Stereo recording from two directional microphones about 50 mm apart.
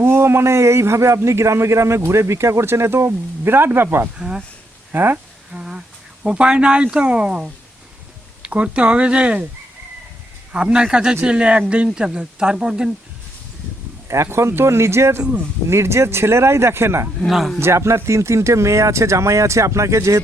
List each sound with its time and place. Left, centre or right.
0.0 s a man's voice: right
3.8 s speech: right
5.5 s a sound: centre
6.2 s speech: centre
10.5 s speech: centre
14.3 s a man's voice: right
17.2 s speech: centre
17.6 s speech: right